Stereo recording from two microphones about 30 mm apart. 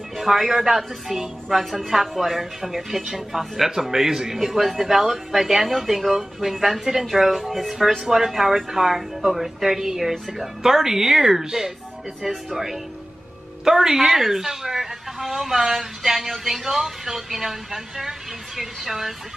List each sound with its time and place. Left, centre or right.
0.2 s speech: centre